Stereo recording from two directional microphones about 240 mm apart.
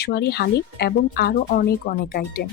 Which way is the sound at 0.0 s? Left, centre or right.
Left.